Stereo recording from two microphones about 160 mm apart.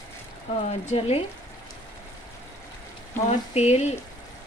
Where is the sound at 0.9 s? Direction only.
40° left (ahead or behind).